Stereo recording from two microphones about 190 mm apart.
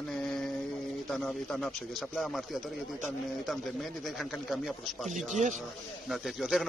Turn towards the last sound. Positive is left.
turn(degrees=0)  # may be behind; listen again after turning